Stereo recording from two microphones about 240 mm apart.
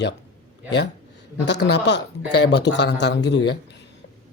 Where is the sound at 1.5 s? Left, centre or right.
Left.